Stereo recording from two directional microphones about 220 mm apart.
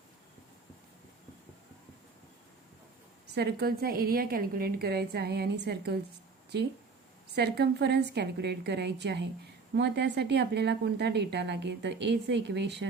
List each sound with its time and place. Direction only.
3.3 s a woman's voice: 45° right (ahead or behind)